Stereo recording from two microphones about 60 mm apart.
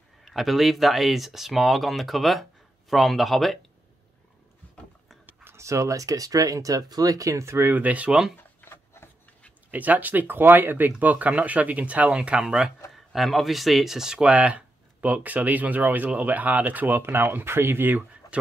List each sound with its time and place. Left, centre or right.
0.2 s speech: centre
5.2 s a sound: right
5.6 s speech: right
7.8 s speech: right
8.6 s rub: left
9.7 s speech: right
18.2 s a sound: left